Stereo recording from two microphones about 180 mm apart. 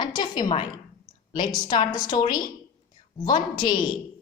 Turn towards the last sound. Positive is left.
turn(degrees=25)  # may be behind; listen again after turning